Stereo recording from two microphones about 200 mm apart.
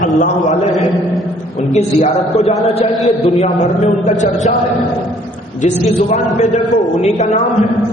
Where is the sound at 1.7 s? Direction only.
35° left (ahead or behind).